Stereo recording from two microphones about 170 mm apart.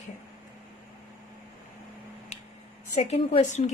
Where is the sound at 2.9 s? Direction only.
35° left (ahead or behind).